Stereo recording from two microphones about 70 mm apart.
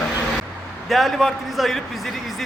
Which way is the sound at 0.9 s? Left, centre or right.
Centre.